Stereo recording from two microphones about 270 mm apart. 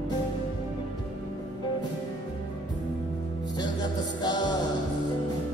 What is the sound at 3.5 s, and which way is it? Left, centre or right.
Music, centre.